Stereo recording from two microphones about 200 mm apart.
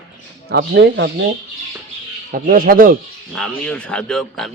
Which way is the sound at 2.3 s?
45° right (ahead or behind).